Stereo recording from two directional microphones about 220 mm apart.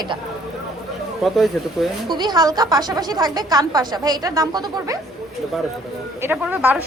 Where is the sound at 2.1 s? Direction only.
20° right (ahead or behind).